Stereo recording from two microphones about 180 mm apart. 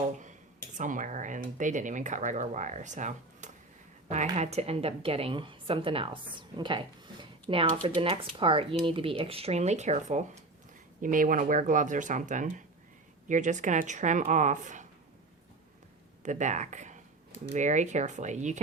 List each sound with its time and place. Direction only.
0.8 s a woman's voice: 45° right (ahead or behind)
16.2 s a woman's voice: 45° right (ahead or behind)